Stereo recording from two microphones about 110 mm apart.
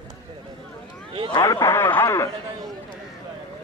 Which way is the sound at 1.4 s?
25° left (ahead or behind).